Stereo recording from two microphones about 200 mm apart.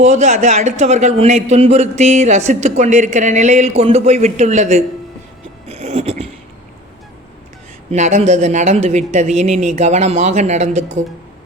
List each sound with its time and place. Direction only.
0.0 s a man's voice: 35° right (ahead or behind)
5.6 s a sound: 35° right (ahead or behind)
7.9 s a man's voice: 35° right (ahead or behind)